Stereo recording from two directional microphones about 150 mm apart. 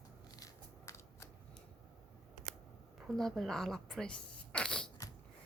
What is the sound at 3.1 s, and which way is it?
Speech, centre (ahead or behind).